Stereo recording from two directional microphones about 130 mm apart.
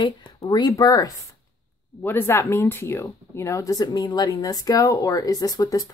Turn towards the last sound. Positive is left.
turn(degrees=25)  # may be behind; listen again after turning